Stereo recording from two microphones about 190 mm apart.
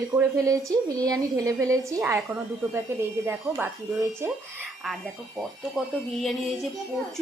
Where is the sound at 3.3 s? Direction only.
10° right (ahead or behind).